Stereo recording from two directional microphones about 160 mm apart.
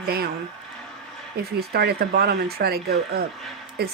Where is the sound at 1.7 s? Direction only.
80° right.